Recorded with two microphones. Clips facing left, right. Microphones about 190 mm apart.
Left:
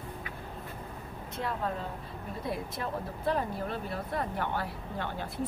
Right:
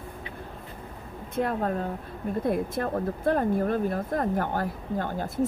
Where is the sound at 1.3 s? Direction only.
50° right (ahead or behind).